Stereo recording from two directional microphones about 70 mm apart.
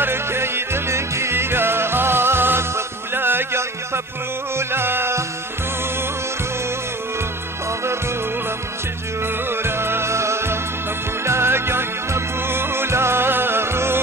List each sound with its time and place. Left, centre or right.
0.0 s music: right
9.5 s music: right